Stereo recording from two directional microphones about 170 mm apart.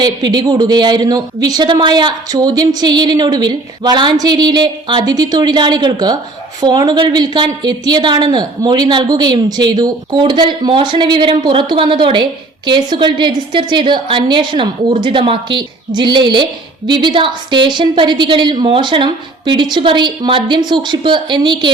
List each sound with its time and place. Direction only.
0.0 s a woman's voice: 25° right (ahead or behind)